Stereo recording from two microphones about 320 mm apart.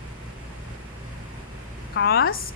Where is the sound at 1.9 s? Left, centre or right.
Left.